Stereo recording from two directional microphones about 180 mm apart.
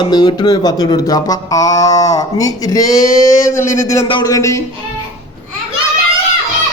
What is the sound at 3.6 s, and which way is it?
Speech, 45° left (ahead or behind).